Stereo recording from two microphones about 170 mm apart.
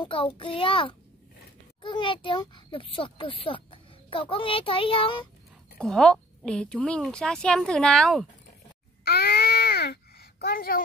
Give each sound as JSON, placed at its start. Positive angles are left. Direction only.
{"t": 0.0, "sound": "a child's voice", "side_deg": 30}
{"t": 5.8, "sound": "a woman's voice", "side_deg": 5}
{"t": 9.0, "sound": "a sound", "side_deg": 65}